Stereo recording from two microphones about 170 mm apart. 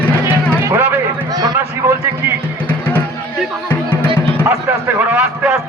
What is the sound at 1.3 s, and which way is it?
Run, 25° right (ahead or behind).